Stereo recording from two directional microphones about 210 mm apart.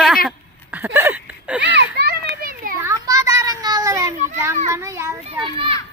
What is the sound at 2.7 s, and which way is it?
Children playing, 15° right (ahead or behind).